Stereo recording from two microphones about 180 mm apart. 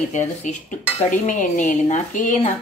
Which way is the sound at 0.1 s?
40° left (ahead or behind).